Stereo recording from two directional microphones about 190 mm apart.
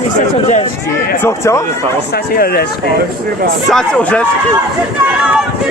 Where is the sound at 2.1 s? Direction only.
55° left (ahead or behind).